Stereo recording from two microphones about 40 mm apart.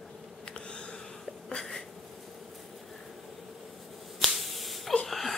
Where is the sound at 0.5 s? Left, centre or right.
Left.